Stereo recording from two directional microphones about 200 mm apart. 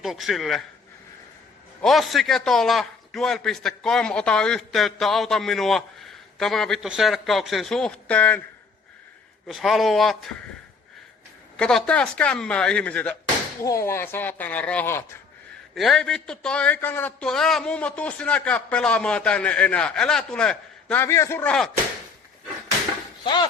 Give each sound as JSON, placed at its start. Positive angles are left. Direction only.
{"t": 0.0, "sound": "a man's voice", "side_deg": 0}
{"t": 1.8, "sound": "a man's voice", "side_deg": 0}
{"t": 9.5, "sound": "a man's voice", "side_deg": 0}
{"t": 11.5, "sound": "a man's voice", "side_deg": 5}
{"t": 23.2, "sound": "speech", "side_deg": 25}